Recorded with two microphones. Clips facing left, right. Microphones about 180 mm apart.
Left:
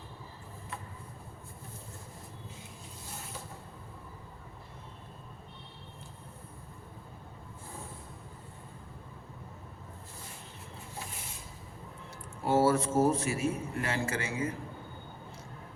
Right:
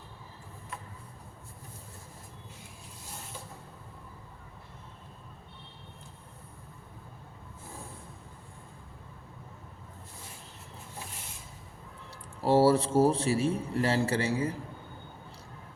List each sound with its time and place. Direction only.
12.4 s a man's voice: 30° right (ahead or behind)